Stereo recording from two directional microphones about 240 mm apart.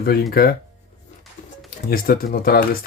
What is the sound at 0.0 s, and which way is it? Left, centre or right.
Speech, left.